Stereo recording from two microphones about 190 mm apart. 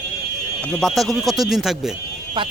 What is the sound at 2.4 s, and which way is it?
Speech, 25° right (ahead or behind).